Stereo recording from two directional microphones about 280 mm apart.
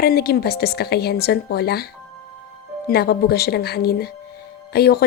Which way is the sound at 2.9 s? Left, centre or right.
Left.